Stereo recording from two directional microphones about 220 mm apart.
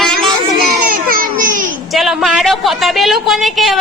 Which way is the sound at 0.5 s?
40° right (ahead or behind).